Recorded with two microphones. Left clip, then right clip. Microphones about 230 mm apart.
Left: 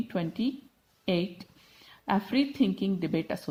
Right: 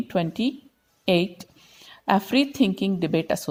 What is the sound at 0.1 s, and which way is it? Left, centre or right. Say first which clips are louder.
A woman's voice: right 9 dB; right.